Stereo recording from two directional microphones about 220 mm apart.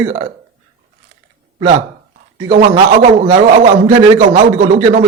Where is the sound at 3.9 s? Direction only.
10° right (ahead or behind).